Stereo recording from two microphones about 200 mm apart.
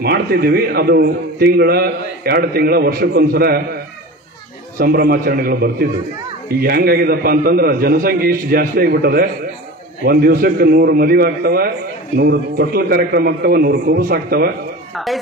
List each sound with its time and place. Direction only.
0.0 s a man's voice: 50° right (ahead or behind)